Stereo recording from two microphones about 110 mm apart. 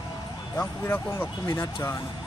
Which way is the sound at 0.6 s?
20° left (ahead or behind).